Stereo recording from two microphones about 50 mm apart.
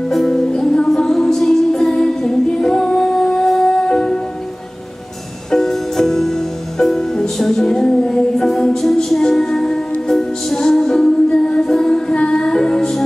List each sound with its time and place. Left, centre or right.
0.1 s music: centre
5.5 s music: centre